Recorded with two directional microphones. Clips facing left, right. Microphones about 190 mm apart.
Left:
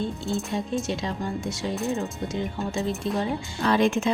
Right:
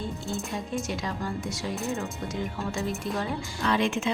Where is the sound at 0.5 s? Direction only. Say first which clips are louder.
Left 4 dB; 25° left (ahead or behind).